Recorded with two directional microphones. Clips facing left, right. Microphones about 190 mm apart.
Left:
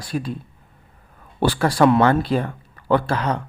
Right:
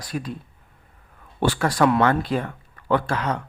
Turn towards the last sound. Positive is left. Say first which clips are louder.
# left 3 dB
turn(degrees=30)  # may be behind; listen again after turning